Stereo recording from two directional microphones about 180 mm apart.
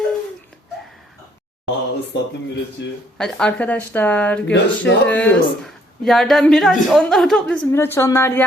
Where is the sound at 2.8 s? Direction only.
75° left (ahead or behind).